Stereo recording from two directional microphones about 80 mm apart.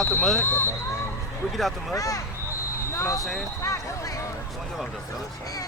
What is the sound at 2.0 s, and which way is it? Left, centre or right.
Speech, left.